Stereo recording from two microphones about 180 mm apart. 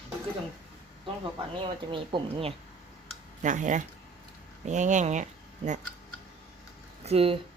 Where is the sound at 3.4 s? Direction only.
45° right (ahead or behind).